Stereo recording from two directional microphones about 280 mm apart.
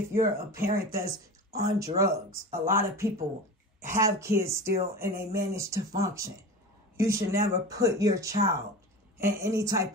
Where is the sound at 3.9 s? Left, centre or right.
Centre.